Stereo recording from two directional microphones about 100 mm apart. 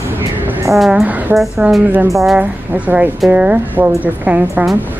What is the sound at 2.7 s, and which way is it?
Speech, 15° right (ahead or behind).